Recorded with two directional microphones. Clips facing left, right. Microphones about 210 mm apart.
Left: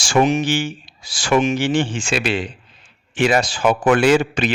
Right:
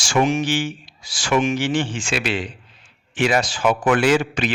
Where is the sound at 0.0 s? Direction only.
30° left (ahead or behind).